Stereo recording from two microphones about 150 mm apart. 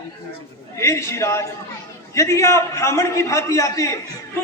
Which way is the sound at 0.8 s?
20° left (ahead or behind).